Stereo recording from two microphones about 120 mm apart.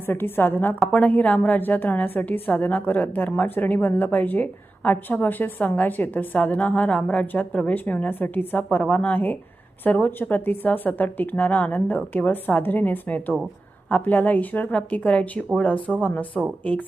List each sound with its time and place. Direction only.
0.0 s a woman's voice: 15° left (ahead or behind)